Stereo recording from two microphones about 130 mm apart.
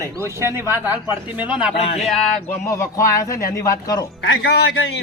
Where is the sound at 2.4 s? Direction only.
25° left (ahead or behind).